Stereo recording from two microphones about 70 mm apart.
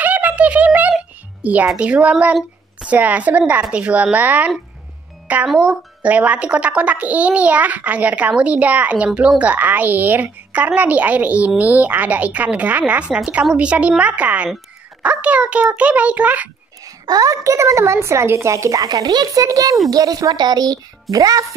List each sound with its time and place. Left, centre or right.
0.0 s a sound: right
1.4 s a woman's voice: right
5.5 s a woman's voice: centre
16.8 s a woman's voice: right
18.9 s a child's voice: right
19.4 s a woman's voice: right